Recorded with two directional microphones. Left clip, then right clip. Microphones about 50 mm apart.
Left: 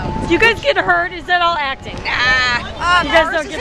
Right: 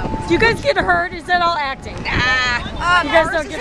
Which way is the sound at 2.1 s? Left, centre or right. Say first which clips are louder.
Left 2 dB; centre.